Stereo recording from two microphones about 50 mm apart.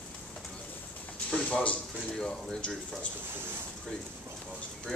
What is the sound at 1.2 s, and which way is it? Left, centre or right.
Speech, left.